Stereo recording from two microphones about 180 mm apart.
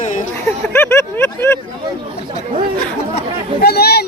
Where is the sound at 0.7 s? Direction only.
15° left (ahead or behind).